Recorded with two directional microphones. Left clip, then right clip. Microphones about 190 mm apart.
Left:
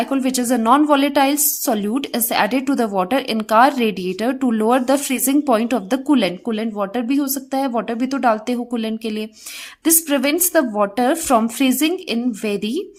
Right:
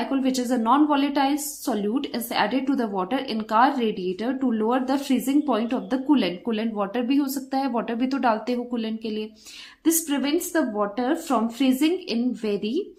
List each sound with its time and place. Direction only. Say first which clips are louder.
0.0 s a woman's voice: left 5 dB; 40° left (ahead or behind)